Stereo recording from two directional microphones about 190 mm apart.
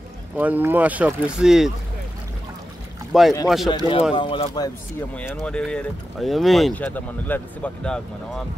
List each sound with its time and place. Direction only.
0.4 s speech: 10° right (ahead or behind)
3.1 s speech: centre (ahead or behind)
4.1 s speech: 25° left (ahead or behind)
5.1 s speech: 5° left (ahead or behind)